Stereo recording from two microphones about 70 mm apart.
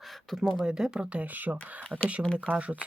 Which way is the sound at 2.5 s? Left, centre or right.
Centre.